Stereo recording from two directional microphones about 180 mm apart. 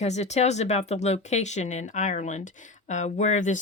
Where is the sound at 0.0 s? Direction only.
40° left (ahead or behind).